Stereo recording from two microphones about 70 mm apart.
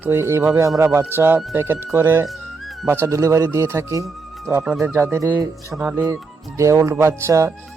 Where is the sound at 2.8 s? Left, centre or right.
Right.